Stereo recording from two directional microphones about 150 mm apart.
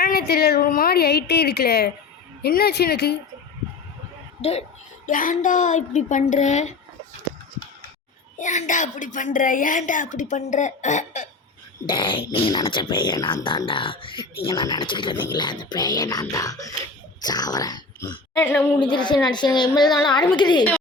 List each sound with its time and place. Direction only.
0.0 s a woman's voice: 90° left
4.4 s speech: 45° left (ahead or behind)
5.0 s a woman's voice: 65° left (ahead or behind)
8.4 s a woman's voice: 55° left (ahead or behind)
11.9 s a woman's voice: 35° left (ahead or behind)